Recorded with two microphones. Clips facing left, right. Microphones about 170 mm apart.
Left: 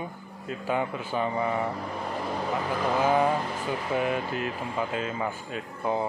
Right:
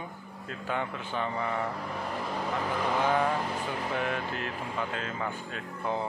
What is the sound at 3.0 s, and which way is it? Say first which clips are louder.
Speech: left 4 dB; 10° left (ahead or behind).